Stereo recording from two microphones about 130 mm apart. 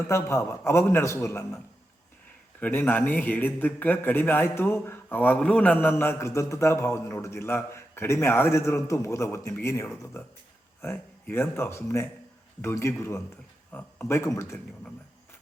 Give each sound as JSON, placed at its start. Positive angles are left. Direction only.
{"t": 0.1, "sound": "a man's voice", "side_deg": 20}
{"t": 2.6, "sound": "a man's voice", "side_deg": 15}